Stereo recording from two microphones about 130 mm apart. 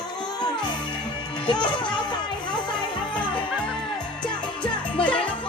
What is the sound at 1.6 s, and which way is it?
Music, 35° left (ahead or behind).